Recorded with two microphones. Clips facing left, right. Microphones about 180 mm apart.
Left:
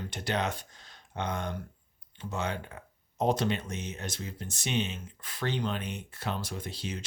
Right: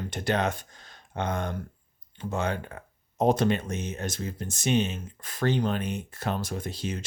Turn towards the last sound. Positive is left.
turn(degrees=-50)  # may be behind; listen again after turning